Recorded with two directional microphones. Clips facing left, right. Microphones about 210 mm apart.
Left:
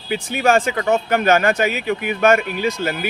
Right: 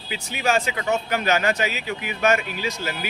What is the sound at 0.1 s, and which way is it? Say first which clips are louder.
Speech: left 6 dB; 50° left (ahead or behind).